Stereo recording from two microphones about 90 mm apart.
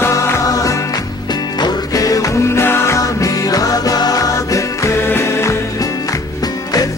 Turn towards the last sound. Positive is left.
turn(degrees=25)  # may be behind; listen again after turning